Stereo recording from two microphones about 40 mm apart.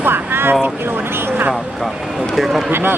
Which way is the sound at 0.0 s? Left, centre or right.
Right.